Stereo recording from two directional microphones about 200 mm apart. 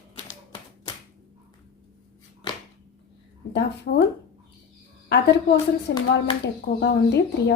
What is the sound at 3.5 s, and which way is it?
Speech, 60° left (ahead or behind).